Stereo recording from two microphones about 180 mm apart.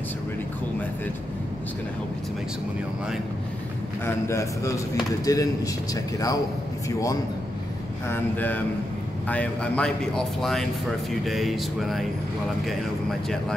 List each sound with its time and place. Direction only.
4.0 s a man's voice: 15° left (ahead or behind)
8.1 s a man's voice: 10° left (ahead or behind)